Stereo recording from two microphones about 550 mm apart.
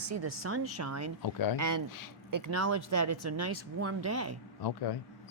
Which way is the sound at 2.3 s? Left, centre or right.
Right.